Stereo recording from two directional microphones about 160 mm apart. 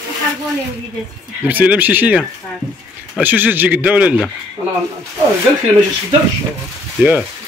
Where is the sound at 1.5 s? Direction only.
10° right (ahead or behind).